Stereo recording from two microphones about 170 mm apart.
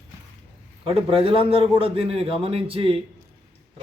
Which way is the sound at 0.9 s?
35° right (ahead or behind).